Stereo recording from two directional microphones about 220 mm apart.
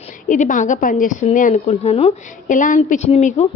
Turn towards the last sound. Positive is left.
turn(degrees=30)  # may be behind; listen again after turning